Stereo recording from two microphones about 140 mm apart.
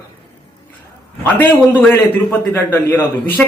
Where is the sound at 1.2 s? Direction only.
15° left (ahead or behind).